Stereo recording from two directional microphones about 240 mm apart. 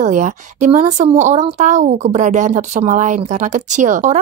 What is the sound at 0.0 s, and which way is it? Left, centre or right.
Speech, right.